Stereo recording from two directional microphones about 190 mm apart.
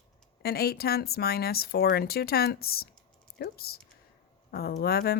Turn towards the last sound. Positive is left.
turn(degrees=55)  # may be behind; listen again after turning